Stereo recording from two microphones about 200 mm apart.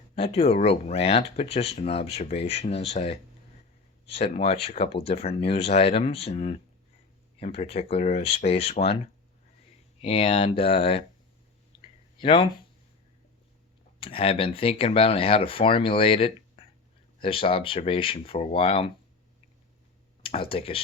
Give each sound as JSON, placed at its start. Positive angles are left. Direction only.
{"t": 0.2, "sound": "speech", "side_deg": 30}
{"t": 10.0, "sound": "speech", "side_deg": 30}
{"t": 11.8, "sound": "clicking", "side_deg": 25}
{"t": 14.0, "sound": "speech", "side_deg": 30}
{"t": 20.2, "sound": "speech", "side_deg": 30}